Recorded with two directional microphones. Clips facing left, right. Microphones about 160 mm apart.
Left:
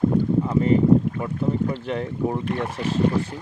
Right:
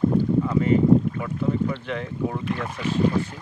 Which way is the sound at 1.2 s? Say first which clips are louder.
Left 1 dB; 30° left (ahead or behind).